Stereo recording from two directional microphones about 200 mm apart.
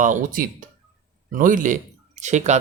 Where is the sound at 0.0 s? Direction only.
40° right (ahead or behind).